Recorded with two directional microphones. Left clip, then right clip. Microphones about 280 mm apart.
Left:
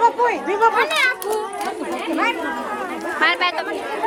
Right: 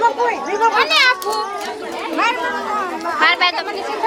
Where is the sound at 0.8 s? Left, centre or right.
Right.